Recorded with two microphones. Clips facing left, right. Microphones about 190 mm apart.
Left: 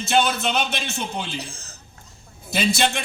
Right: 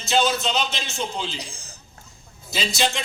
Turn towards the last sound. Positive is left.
turn(degrees=55)  # may be behind; listen again after turning